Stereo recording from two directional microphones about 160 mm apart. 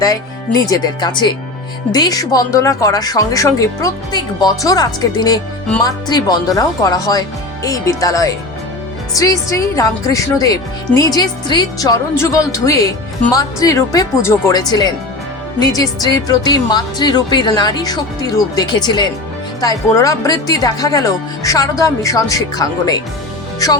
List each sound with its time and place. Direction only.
0.0 s speech: 20° left (ahead or behind)